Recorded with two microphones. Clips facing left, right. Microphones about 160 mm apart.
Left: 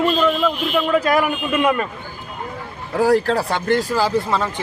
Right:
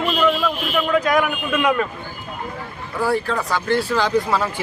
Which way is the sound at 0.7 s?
5° left (ahead or behind).